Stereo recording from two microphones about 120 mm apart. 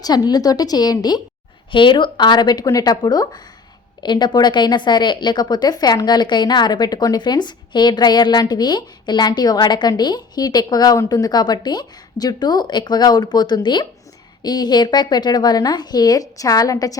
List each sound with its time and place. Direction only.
0.3 s speech: 30° left (ahead or behind)